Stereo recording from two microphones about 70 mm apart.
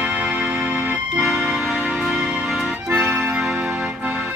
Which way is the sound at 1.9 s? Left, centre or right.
Centre.